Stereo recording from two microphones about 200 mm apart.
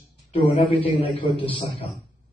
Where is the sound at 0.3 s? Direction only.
25° left (ahead or behind).